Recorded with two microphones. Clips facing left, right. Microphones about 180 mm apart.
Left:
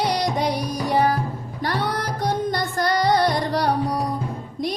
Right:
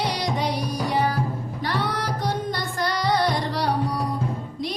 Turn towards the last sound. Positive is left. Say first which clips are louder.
# left 5 dB
turn(degrees=45)  # may be behind; listen again after turning